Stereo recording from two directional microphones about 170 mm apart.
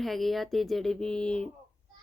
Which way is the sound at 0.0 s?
Centre (ahead or behind).